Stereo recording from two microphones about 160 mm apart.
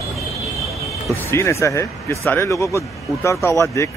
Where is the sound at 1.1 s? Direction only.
15° left (ahead or behind).